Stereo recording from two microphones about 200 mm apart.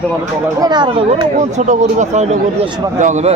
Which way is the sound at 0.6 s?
20° right (ahead or behind).